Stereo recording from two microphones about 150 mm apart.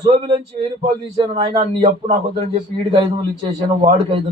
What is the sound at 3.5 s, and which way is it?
Speech, 30° right (ahead or behind).